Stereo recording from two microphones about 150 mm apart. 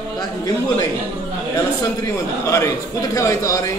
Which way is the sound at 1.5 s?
20° left (ahead or behind).